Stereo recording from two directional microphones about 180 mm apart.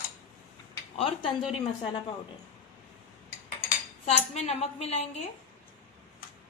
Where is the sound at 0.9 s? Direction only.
30° left (ahead or behind).